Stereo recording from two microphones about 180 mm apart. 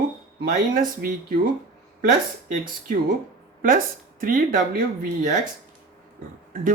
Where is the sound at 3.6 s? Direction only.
50° right (ahead or behind).